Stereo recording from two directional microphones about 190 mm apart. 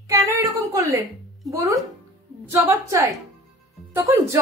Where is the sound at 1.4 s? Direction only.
15° right (ahead or behind).